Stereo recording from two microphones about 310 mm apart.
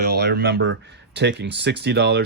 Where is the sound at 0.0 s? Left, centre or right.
Right.